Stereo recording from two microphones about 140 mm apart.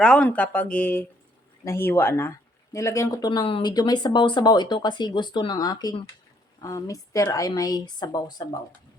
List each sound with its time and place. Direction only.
0.0 s a woman's voice: 5° left (ahead or behind); by 8.4 s 25° left (ahead or behind)